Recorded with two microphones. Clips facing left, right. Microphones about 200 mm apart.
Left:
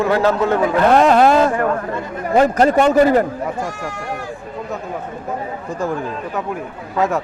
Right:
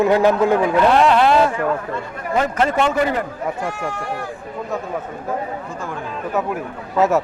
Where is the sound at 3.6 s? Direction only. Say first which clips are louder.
Right 1 dB; 60° right (ahead or behind).